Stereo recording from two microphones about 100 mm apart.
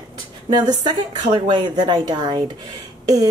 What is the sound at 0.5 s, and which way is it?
Speech, 45° right (ahead or behind).